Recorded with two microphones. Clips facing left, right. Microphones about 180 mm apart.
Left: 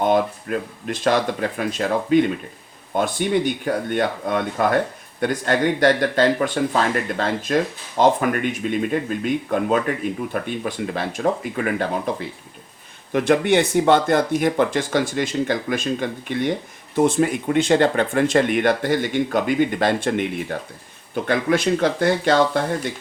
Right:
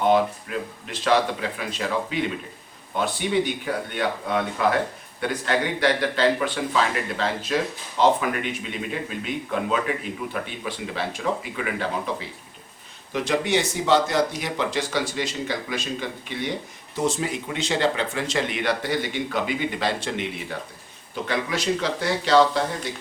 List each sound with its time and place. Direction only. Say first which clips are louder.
0.0 s speech: left 1 dB; 50° left (ahead or behind)